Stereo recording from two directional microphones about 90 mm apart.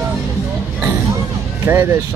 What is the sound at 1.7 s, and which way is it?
Speech, 20° right (ahead or behind).